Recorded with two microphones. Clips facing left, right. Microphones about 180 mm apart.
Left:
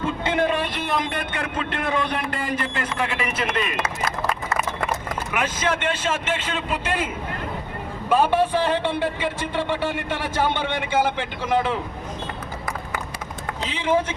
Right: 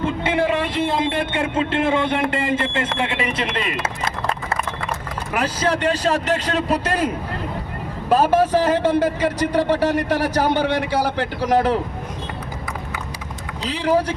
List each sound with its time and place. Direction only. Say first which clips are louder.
0.0 s speech: right 2 dB; 25° right (ahead or behind)
5.3 s a man's voice: right 4 dB; 35° right (ahead or behind)
8.1 s a man's voice: right 3 dB; 40° right (ahead or behind)
13.7 s a man's voice: right 3 dB; 35° right (ahead or behind)